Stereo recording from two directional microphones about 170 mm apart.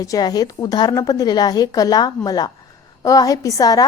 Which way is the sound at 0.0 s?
20° left (ahead or behind).